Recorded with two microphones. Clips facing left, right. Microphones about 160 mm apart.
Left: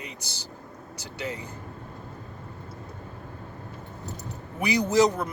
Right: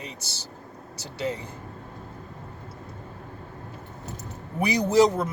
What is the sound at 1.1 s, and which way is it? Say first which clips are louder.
Speech: right 4 dB; 30° right (ahead or behind).